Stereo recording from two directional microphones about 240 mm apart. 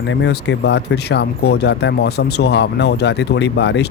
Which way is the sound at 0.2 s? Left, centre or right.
Left.